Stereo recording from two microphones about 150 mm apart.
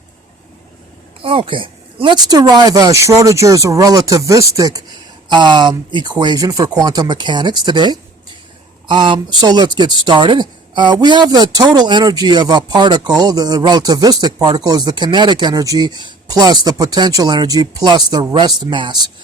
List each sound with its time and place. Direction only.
1.2 s speech: 35° right (ahead or behind)